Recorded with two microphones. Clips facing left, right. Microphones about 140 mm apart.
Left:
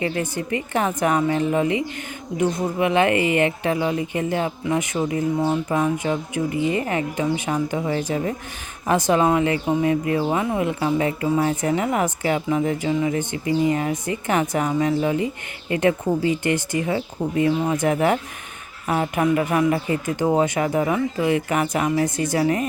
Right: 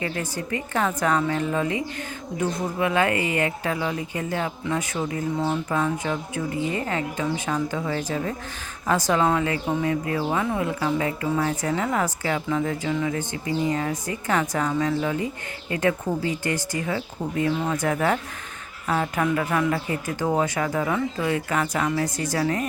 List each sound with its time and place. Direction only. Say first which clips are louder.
0.0 s speech: left 4 dB; 20° left (ahead or behind)